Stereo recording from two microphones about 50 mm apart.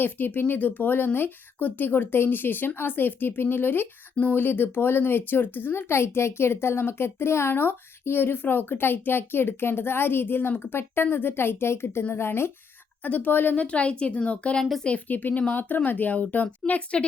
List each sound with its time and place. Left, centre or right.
0.0 s speech: left
6.1 s speech: left
13.0 s speech: left
13.6 s speech: left